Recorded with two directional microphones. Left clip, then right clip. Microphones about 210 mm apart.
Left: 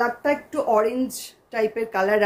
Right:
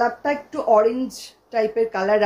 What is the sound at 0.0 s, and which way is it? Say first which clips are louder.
A woman's voice: right 1 dB; 20° left (ahead or behind).